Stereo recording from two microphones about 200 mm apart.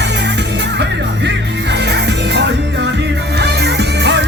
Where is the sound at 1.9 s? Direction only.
60° right (ahead or behind).